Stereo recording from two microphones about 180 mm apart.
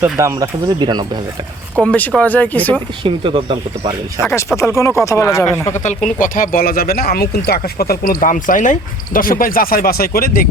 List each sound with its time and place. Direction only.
0.0 s speech: 15° right (ahead or behind)
1.8 s speech: 5° left (ahead or behind)
3.0 s speech: 25° right (ahead or behind)
4.5 s speech: 15° left (ahead or behind)
6.1 s speech: 50° left (ahead or behind)